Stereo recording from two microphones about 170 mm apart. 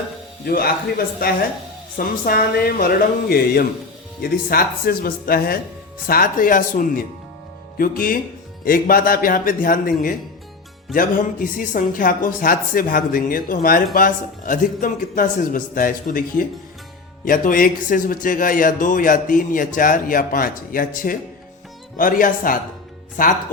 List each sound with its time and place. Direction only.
0.4 s speech: 60° left (ahead or behind)